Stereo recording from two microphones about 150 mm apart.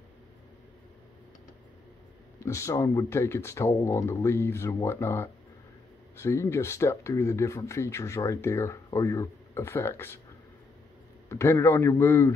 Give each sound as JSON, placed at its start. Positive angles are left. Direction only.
{"t": 2.4, "sound": "speech", "side_deg": 20}
{"t": 11.2, "sound": "speech", "side_deg": 20}